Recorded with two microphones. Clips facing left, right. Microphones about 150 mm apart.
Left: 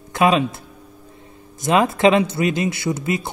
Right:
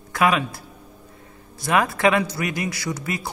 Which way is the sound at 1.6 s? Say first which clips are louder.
Left 4 dB; 20° left (ahead or behind).